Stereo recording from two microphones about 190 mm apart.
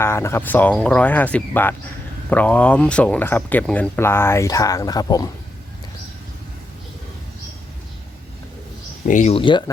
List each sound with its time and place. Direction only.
0.0 s speech: 15° left (ahead or behind)
9.0 s speech: 40° left (ahead or behind)